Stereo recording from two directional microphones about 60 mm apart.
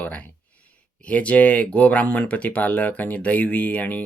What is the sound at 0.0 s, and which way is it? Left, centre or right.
Speech, left.